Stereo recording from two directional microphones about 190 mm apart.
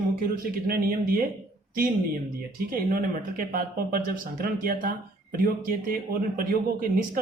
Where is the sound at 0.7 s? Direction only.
50° right (ahead or behind).